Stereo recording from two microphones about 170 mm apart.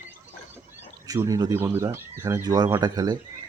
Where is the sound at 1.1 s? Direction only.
20° right (ahead or behind).